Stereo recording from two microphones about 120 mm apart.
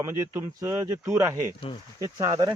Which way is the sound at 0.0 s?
25° right (ahead or behind).